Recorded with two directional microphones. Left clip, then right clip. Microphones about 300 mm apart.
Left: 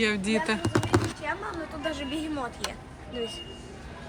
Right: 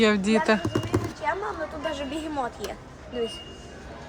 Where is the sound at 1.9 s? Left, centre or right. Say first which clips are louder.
Left 2 dB; right.